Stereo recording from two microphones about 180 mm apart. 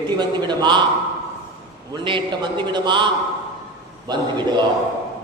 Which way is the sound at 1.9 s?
25° right (ahead or behind).